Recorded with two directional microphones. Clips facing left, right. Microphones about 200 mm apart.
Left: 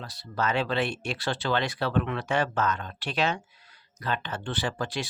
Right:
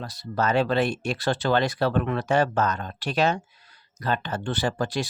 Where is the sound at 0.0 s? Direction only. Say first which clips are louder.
Right 4 dB; 45° right (ahead or behind).